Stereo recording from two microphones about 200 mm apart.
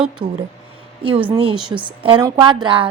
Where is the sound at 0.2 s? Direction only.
25° right (ahead or behind).